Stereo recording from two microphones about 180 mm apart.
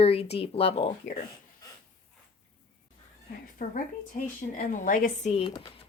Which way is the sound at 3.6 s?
45° left (ahead or behind).